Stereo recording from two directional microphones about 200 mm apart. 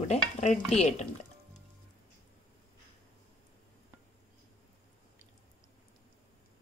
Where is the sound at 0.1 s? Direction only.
35° left (ahead or behind).